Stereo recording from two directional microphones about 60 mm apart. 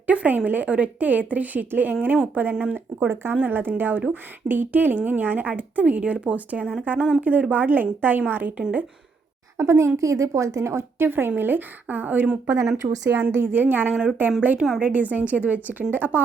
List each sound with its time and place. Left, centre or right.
0.1 s a woman's voice: right
9.6 s a woman's voice: right
13.1 s a woman's voice: right